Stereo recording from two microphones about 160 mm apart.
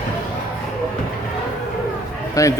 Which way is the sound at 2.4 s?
20° left (ahead or behind).